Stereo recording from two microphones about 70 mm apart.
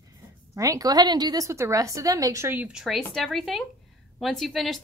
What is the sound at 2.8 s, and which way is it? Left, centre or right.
A woman's voice, centre.